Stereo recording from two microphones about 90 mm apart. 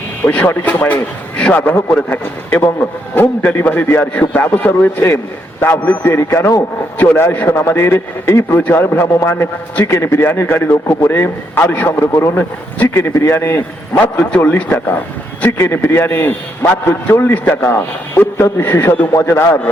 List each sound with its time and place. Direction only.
0.3 s a man's voice: 20° left (ahead or behind)